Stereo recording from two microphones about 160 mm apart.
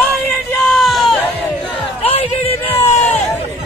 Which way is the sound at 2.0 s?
40° left (ahead or behind).